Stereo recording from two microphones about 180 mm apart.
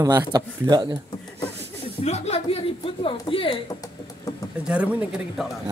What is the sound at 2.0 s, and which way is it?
A woman's voice, 35° left (ahead or behind).